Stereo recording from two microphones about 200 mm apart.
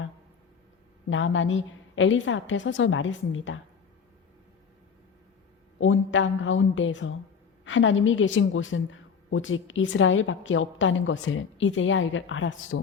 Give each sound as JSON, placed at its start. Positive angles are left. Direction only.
{"t": 1.1, "sound": "a woman's voice", "side_deg": 70}
{"t": 5.8, "sound": "a woman's voice", "side_deg": 75}